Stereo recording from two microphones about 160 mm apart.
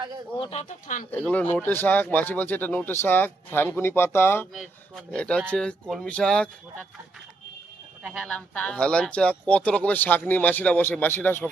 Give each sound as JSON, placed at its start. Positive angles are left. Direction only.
{"t": 0.5, "sound": "speech", "side_deg": 50}
{"t": 1.1, "sound": "speech", "side_deg": 10}
{"t": 4.5, "sound": "speech", "side_deg": 5}
{"t": 8.0, "sound": "speech", "side_deg": 0}